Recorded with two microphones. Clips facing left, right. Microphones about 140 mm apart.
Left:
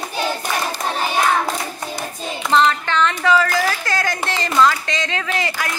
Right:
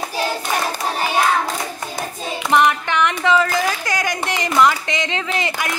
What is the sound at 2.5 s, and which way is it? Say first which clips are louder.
A woman's voice: even; 15° right (ahead or behind).